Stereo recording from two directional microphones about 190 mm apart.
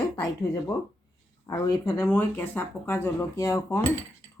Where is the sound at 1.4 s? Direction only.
15° left (ahead or behind).